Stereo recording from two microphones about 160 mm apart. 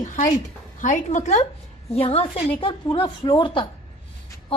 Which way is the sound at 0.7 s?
50° left (ahead or behind).